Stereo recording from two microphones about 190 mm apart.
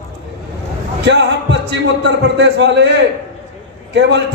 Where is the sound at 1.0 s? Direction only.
65° right (ahead or behind).